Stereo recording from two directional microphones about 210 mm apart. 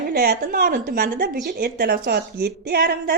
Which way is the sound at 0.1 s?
45° right (ahead or behind).